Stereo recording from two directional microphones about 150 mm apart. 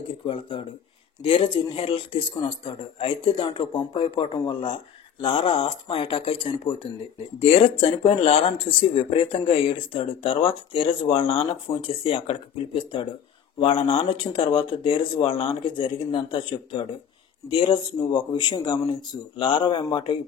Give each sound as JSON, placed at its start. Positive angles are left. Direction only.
{"t": 0.3, "sound": "speech", "side_deg": 35}